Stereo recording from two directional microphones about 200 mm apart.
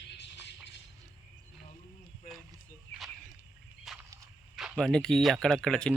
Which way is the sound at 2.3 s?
45° left (ahead or behind).